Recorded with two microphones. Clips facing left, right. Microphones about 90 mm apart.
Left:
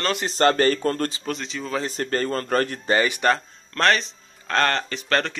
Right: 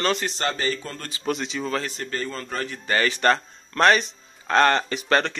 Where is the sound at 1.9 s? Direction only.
45° left (ahead or behind).